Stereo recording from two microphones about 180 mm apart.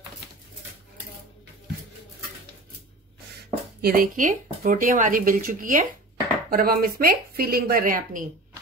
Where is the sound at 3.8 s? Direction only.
55° right (ahead or behind).